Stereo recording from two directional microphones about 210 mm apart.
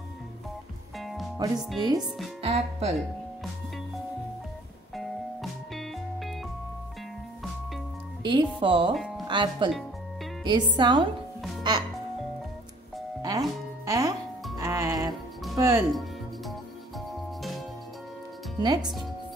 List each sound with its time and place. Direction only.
0.9 s music: centre (ahead or behind)
1.8 s speech: 20° right (ahead or behind)
2.4 s speech: 30° right (ahead or behind)
4.9 s music: centre (ahead or behind)
8.2 s speech: 20° right (ahead or behind)
8.9 s music: centre (ahead or behind)
9.3 s speech: 20° right (ahead or behind)
13.2 s music: 20° right (ahead or behind)
15.8 s music: centre (ahead or behind)
18.6 s music: 20° right (ahead or behind)